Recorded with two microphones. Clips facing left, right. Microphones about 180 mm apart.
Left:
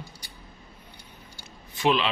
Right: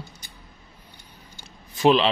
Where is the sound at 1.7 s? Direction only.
35° right (ahead or behind).